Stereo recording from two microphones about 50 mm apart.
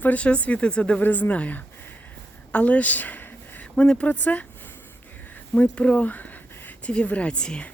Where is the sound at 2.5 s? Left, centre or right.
Left.